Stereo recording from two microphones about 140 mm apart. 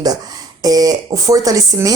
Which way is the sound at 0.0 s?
25° right (ahead or behind).